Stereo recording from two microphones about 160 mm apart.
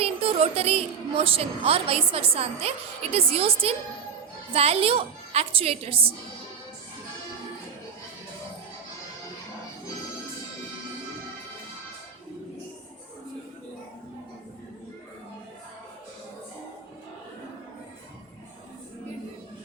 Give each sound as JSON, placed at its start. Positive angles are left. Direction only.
{"t": 0.0, "sound": "a woman's voice", "side_deg": -40}